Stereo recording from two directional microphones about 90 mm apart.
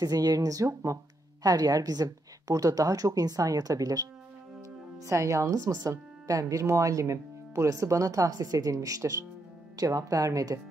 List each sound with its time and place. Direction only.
0.0 s a woman's voice: 45° right (ahead or behind)